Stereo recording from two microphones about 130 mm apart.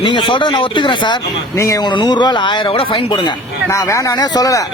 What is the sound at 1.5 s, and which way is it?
Speech, 25° left (ahead or behind).